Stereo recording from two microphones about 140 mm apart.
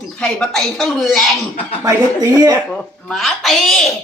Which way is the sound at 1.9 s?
25° right (ahead or behind).